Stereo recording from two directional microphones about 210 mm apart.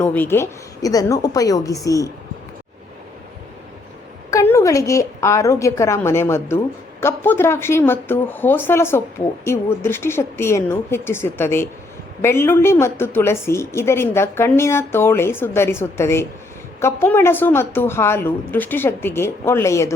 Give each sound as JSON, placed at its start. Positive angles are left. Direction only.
{"t": 0.0, "sound": "speech", "side_deg": 10}
{"t": 4.3, "sound": "speech", "side_deg": 15}